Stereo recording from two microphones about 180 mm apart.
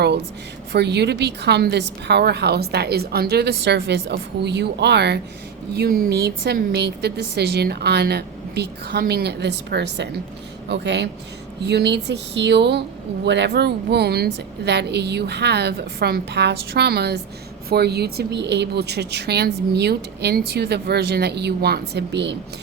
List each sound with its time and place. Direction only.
0.7 s a woman's voice: 65° right (ahead or behind)
5.7 s a woman's voice: 55° right (ahead or behind); by 22.4 s 75° right (ahead or behind)